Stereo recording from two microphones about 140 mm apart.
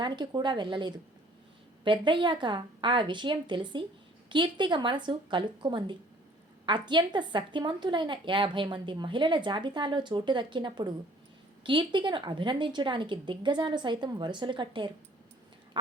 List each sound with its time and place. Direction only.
0.0 s a woman's voice: 35° right (ahead or behind)